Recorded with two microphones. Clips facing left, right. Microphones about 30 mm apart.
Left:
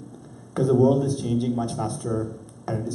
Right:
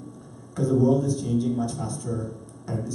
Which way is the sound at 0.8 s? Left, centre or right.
Left.